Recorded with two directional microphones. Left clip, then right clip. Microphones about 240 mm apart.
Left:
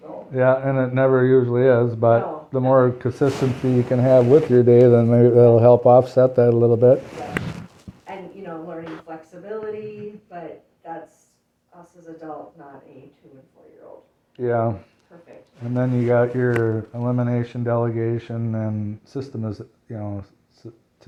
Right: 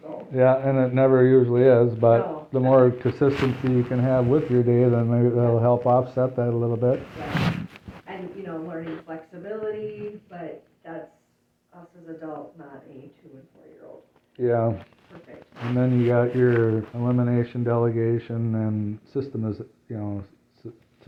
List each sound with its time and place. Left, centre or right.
0.3 s speech: left
3.9 s speech: left
8.8 s speech: left
14.3 s speech: left